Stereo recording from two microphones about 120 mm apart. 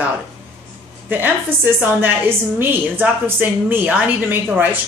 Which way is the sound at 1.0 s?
15° right (ahead or behind).